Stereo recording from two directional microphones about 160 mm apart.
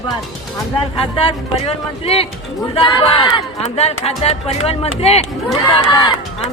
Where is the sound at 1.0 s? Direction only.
35° left (ahead or behind).